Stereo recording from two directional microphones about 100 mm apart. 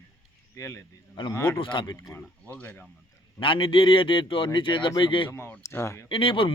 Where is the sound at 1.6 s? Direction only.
55° left (ahead or behind).